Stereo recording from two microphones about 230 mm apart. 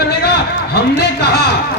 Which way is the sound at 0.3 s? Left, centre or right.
Left.